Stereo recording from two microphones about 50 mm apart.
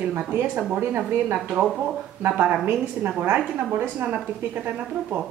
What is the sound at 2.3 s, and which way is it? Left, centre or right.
A woman's voice, right.